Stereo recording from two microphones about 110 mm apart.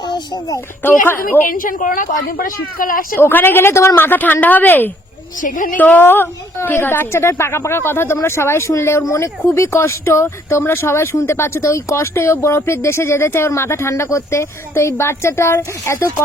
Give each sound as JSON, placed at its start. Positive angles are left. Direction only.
{"t": 0.8, "sound": "a woman's voice", "side_deg": 20}
{"t": 3.2, "sound": "a woman's voice", "side_deg": 20}